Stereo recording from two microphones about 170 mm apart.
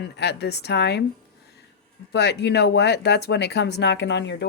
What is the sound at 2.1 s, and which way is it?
Speech, 80° left.